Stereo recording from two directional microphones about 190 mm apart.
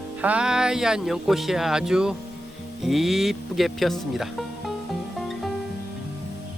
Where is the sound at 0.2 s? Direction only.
5° right (ahead or behind).